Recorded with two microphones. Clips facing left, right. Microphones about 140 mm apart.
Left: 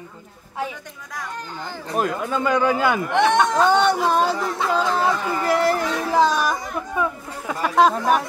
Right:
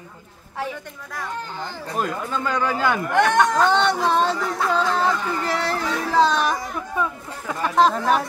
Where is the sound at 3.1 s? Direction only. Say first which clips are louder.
Even; centre (ahead or behind).